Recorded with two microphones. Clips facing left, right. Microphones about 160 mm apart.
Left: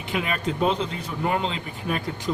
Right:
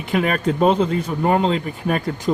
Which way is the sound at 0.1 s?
45° right (ahead or behind).